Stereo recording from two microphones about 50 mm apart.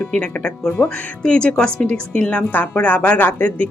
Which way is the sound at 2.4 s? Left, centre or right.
Left.